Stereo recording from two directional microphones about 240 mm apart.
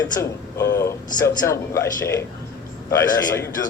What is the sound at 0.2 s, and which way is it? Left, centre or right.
Speech, centre.